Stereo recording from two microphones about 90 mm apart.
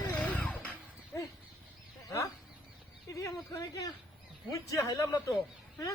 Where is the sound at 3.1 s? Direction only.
40° left (ahead or behind).